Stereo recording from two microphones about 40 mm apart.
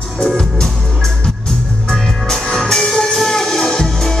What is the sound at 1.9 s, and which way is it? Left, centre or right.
Music, centre.